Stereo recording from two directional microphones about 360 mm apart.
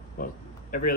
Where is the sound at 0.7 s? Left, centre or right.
Left.